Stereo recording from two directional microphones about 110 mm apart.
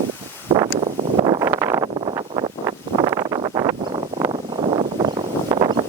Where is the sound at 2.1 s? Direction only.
40° right (ahead or behind).